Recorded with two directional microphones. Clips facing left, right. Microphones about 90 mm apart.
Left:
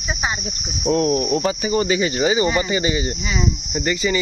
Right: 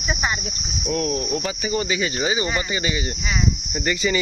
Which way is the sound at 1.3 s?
30° left (ahead or behind).